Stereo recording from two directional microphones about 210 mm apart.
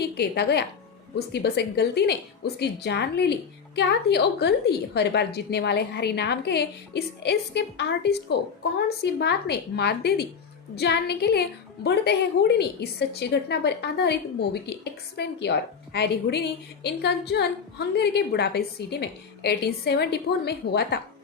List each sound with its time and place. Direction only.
0.0 s a woman's voice: 50° left (ahead or behind)